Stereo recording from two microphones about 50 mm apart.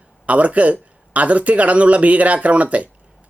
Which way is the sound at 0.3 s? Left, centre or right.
Right.